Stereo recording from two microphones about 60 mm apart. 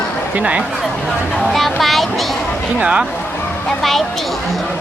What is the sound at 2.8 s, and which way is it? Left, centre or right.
Speech, right.